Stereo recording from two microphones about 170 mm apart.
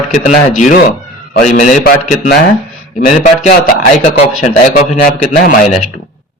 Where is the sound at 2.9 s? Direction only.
50° left (ahead or behind).